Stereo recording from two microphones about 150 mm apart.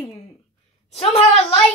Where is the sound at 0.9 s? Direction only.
40° left (ahead or behind).